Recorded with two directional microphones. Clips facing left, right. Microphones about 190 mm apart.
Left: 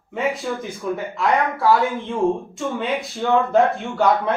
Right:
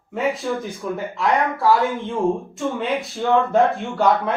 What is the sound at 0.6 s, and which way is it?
Speech, centre (ahead or behind).